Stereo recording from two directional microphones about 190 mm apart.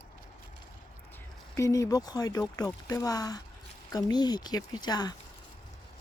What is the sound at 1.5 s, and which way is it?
Speech, 15° left (ahead or behind).